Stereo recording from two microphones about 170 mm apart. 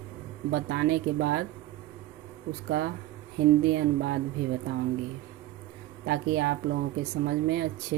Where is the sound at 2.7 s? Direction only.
90° right.